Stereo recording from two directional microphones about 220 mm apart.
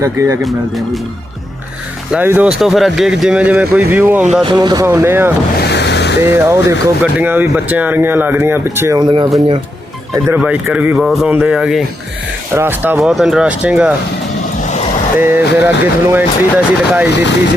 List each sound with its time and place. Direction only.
0.0 s speech: 15° right (ahead or behind)
2.1 s speech: 5° right (ahead or behind)
4.4 s speech: 20° right (ahead or behind)
5.5 s a sound: 50° left (ahead or behind)
6.2 s speech: 10° right (ahead or behind)
10.2 s speech: 10° right (ahead or behind)
15.2 s speech: 10° right (ahead or behind)